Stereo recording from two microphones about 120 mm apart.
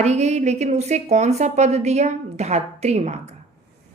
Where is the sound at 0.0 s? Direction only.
70° right (ahead or behind).